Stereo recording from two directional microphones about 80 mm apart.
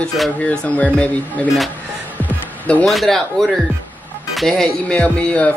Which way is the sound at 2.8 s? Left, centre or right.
Centre.